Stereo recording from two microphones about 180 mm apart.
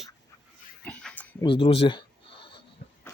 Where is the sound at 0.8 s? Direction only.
5° left (ahead or behind).